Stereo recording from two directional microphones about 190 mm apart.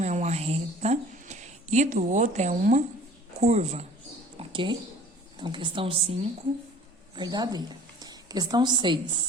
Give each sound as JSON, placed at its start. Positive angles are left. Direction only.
{"t": 0.0, "sound": "a woman's voice", "side_deg": -40}
{"t": 4.4, "sound": "a sound", "side_deg": -25}
{"t": 5.4, "sound": "a woman's voice", "side_deg": -25}